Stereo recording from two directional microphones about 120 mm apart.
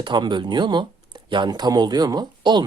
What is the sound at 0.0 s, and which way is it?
Speech, 40° right (ahead or behind).